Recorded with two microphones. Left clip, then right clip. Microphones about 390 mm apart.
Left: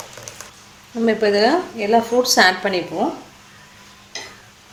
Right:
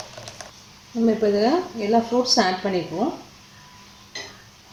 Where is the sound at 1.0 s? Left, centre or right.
Left.